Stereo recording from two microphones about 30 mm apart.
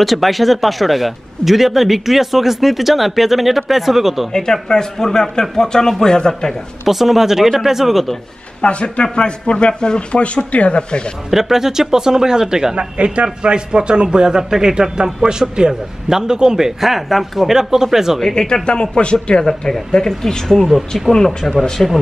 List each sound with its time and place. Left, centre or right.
0.0 s a man's voice: centre
4.3 s a man's voice: centre
6.8 s a man's voice: centre
8.5 s speech: left
11.2 s a man's voice: centre
12.7 s a man's voice: right; by 18.2 s centre
18.5 s speech: left
19.9 s a man's voice: centre